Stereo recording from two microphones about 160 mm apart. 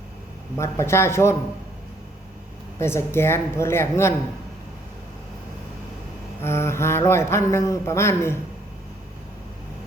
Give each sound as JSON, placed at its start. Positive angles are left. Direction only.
{"t": 0.5, "sound": "speech", "side_deg": 15}
{"t": 2.7, "sound": "speech", "side_deg": 15}
{"t": 6.4, "sound": "speech", "side_deg": 15}